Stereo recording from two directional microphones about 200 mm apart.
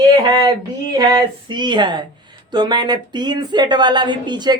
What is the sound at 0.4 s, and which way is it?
A woman's voice, 20° right (ahead or behind).